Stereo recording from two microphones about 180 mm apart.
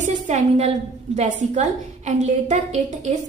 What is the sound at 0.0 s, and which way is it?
A woman's voice, 40° right (ahead or behind).